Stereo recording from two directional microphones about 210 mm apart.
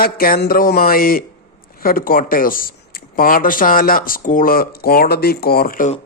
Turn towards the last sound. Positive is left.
turn(degrees=40)  # may be behind; listen again after turning